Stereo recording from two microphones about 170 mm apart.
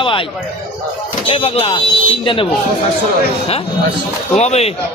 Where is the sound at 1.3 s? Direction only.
35° left (ahead or behind).